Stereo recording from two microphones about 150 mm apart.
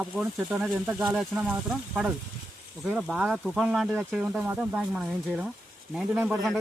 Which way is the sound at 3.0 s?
Centre (ahead or behind).